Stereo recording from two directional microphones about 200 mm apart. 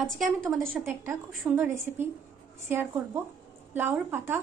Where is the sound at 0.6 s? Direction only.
10° right (ahead or behind).